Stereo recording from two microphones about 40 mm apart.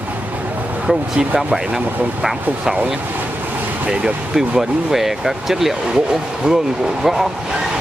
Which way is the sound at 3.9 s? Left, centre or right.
Centre.